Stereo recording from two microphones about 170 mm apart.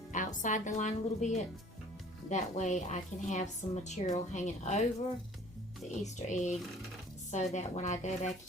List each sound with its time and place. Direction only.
0.1 s a woman's voice: 50° left (ahead or behind)
2.3 s speech: 45° left (ahead or behind)
6.0 s speech: 45° left (ahead or behind)